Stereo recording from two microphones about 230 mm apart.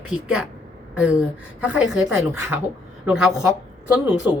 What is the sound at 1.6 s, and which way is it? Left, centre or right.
A woman's voice, centre.